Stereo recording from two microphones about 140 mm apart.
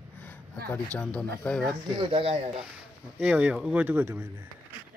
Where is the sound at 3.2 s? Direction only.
5° right (ahead or behind).